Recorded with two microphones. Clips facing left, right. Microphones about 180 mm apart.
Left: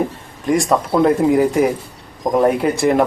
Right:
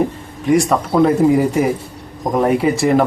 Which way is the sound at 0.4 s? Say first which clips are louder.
Right 2 dB; centre (ahead or behind).